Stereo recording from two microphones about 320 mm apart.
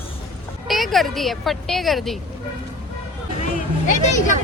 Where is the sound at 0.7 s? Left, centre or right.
Centre.